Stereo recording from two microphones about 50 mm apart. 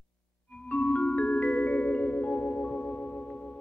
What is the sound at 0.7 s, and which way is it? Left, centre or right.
Marimba, left.